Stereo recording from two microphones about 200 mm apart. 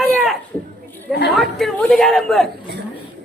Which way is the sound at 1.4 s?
Centre (ahead or behind).